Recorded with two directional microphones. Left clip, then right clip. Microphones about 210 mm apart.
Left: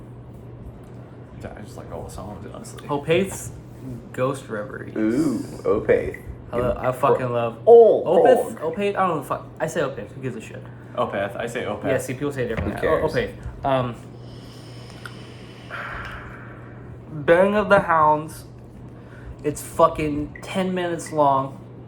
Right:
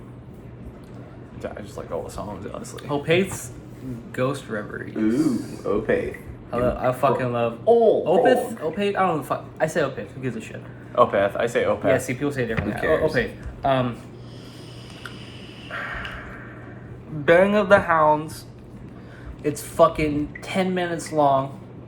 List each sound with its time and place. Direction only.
1.4 s speech: 10° right (ahead or behind)
2.7 s speech: 10° left (ahead or behind)
5.6 s a man's voice: 30° left (ahead or behind)
6.5 s speech: 10° left (ahead or behind)
7.6 s a man's voice: 30° left (ahead or behind)
8.0 s speech: 10° left (ahead or behind)
10.9 s speech: 10° right (ahead or behind)
11.9 s speech: 10° left (ahead or behind)
12.8 s a man's voice: 25° left (ahead or behind)
13.1 s speech: 5° left (ahead or behind)
15.7 s a sound: 10° left (ahead or behind)
17.2 s speech: 10° left (ahead or behind)
19.4 s speech: 10° left (ahead or behind)